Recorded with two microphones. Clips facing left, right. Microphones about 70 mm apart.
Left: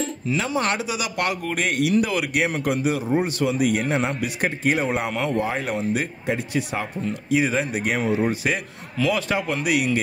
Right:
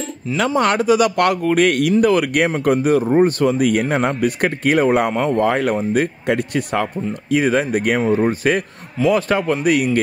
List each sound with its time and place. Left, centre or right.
0.6 s speech: right
5.1 s speech: right
5.4 s speech: right
8.0 s speech: centre
8.3 s speech: right